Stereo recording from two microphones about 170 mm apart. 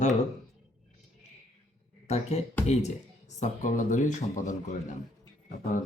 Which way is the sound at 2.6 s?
40° left (ahead or behind).